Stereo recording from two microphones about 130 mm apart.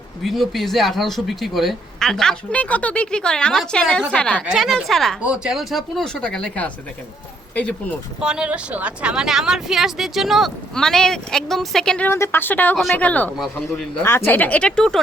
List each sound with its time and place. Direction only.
0.2 s speech: centre (ahead or behind)
4.4 s speech: centre (ahead or behind)
8.2 s speech: 5° right (ahead or behind)
12.0 s speech: 20° left (ahead or behind)
12.7 s speech: centre (ahead or behind)
13.0 s speech: 10° left (ahead or behind)
14.0 s speech: 20° left (ahead or behind)